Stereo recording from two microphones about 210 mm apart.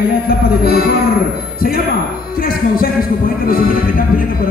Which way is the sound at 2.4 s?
45° left (ahead or behind).